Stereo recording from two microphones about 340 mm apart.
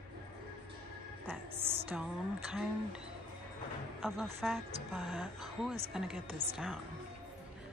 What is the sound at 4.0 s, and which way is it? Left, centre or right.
A woman's voice, centre.